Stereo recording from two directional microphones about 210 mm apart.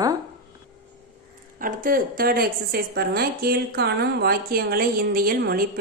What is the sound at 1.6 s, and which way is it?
A woman's voice, 40° right (ahead or behind).